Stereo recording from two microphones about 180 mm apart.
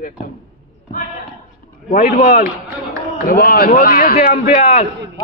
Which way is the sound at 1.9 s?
50° left (ahead or behind).